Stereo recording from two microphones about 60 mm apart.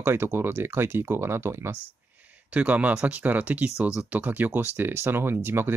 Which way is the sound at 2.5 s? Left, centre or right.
Right.